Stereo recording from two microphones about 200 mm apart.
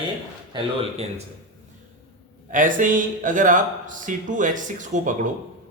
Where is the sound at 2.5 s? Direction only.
40° right (ahead or behind).